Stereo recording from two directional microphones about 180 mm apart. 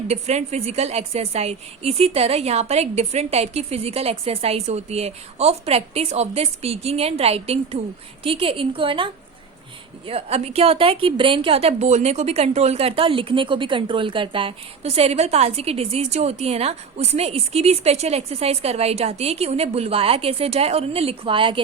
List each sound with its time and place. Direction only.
0.1 s a woman's voice: 35° right (ahead or behind)
10.1 s a woman's voice: 35° right (ahead or behind)